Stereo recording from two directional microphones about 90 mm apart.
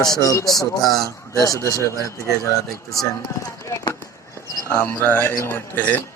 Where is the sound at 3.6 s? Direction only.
40° left (ahead or behind).